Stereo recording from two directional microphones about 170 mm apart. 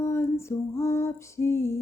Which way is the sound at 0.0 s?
15° left (ahead or behind).